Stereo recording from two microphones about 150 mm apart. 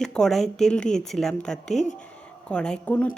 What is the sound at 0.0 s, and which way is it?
A woman's voice, 5° left (ahead or behind).